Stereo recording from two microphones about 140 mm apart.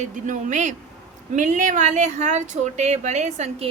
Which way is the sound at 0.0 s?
60° right (ahead or behind).